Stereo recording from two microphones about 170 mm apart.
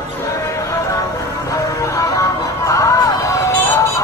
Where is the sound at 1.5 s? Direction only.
20° left (ahead or behind).